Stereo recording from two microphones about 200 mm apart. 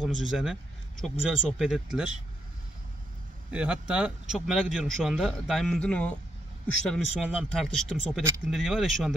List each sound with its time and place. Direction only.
0.0 s a man's voice: 5° right (ahead or behind)
3.5 s a man's voice: 5° right (ahead or behind)